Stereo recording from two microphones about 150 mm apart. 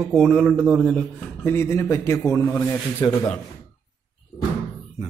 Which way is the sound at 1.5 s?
15° left (ahead or behind).